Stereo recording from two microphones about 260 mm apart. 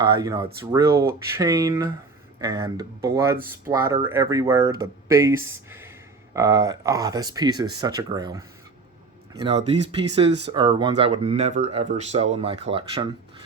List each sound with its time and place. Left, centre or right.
0.1 s speech: centre
6.3 s speech: centre